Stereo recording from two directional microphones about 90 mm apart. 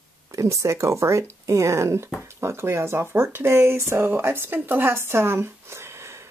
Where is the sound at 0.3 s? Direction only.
35° right (ahead or behind).